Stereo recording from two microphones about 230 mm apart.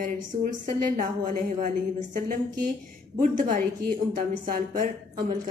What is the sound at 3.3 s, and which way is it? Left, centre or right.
A woman's voice, right.